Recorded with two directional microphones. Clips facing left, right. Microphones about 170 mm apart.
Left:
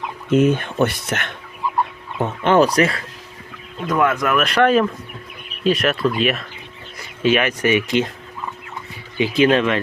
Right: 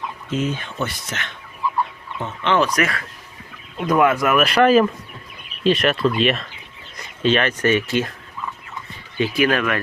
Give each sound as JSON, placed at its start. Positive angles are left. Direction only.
{"t": 0.3, "sound": "speech", "side_deg": 55}
{"t": 3.8, "sound": "speech", "side_deg": -10}
{"t": 9.1, "sound": "speech", "side_deg": 20}